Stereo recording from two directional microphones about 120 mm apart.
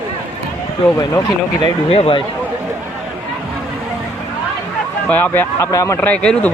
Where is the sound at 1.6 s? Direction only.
50° left (ahead or behind).